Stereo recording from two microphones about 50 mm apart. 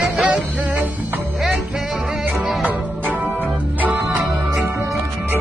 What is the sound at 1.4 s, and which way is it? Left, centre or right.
Music, centre.